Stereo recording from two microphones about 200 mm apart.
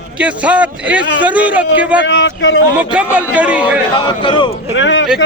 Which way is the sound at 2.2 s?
60° left (ahead or behind).